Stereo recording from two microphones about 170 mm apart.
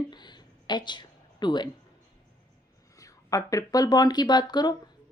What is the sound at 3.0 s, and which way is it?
Speech, 20° left (ahead or behind).